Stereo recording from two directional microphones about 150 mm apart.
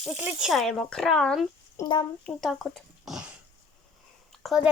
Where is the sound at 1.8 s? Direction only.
20° left (ahead or behind).